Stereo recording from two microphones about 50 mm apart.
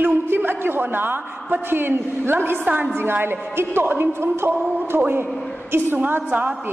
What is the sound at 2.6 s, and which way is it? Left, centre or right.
A woman's voice, right.